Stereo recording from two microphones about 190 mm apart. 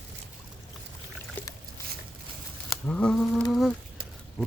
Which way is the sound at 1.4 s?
10° left (ahead or behind).